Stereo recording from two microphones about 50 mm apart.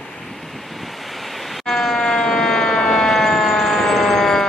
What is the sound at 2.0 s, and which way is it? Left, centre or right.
Siren, centre.